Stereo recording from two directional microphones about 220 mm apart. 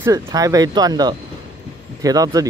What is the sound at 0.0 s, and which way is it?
Speech, 15° right (ahead or behind).